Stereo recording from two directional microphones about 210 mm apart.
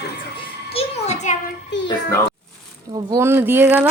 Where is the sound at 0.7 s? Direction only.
30° left (ahead or behind).